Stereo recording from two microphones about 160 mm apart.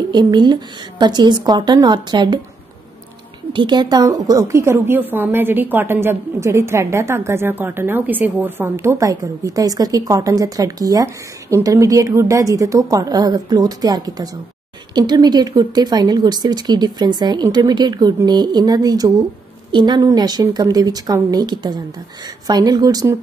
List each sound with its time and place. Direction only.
0.1 s speech: 25° right (ahead or behind)
3.5 s a woman's voice: 30° right (ahead or behind)